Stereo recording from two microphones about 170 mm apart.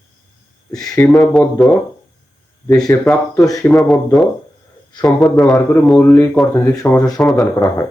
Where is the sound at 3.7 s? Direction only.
Centre (ahead or behind).